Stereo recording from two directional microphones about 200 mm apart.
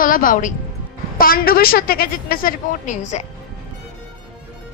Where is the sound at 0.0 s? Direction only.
45° left (ahead or behind).